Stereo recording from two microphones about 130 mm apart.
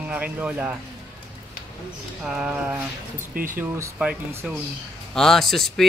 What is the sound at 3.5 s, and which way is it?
Speech, 20° right (ahead or behind).